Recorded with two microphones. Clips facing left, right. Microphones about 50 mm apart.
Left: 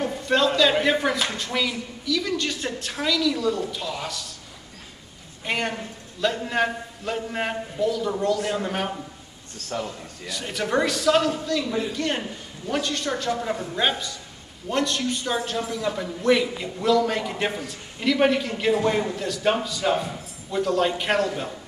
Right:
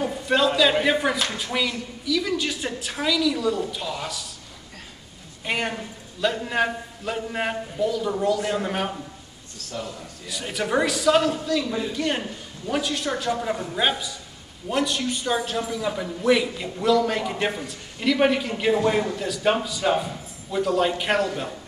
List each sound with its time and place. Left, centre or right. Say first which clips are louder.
0.0 s a man's voice: even; centre
5.4 s a man's voice: even; centre
9.6 s a man's voice: left 7 dB; left
10.2 s a man's voice: even; centre